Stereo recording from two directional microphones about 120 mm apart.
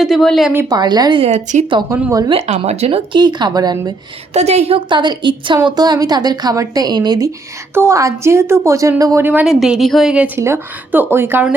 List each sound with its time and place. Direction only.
0.0 s speech: centre (ahead or behind)
0.7 s a woman's voice: 35° right (ahead or behind)
1.2 s speech: 70° right (ahead or behind)
2.0 s a woman's voice: 30° right (ahead or behind)
2.6 s a woman's voice: 65° right (ahead or behind)
3.1 s a woman's voice: 40° right (ahead or behind)
4.4 s a woman's voice: 65° right (ahead or behind)
4.9 s a woman's voice: 40° right (ahead or behind)
7.7 s a woman's voice: 20° right (ahead or behind)
9.2 s a woman's voice: 15° right (ahead or behind)
9.5 s a woman's voice: 5° right (ahead or behind)